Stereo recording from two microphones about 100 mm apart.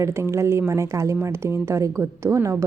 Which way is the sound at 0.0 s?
30° right (ahead or behind).